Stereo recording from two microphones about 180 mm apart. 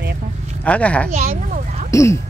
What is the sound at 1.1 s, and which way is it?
Speech, 45° right (ahead or behind).